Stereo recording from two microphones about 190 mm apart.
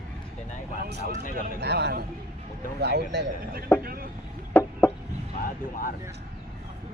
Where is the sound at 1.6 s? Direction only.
60° right (ahead or behind).